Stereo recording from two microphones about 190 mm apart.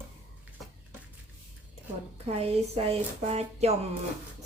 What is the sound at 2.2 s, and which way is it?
Speech, 30° right (ahead or behind).